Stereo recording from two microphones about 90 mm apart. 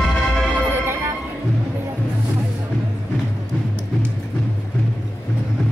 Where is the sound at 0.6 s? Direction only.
25° right (ahead or behind).